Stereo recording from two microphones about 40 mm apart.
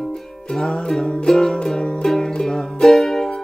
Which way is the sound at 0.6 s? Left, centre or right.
Centre.